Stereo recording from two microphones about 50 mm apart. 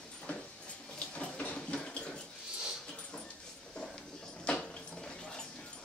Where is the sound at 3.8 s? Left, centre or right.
Centre.